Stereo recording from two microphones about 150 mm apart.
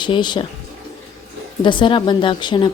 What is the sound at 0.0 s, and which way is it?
Speech, 30° left (ahead or behind).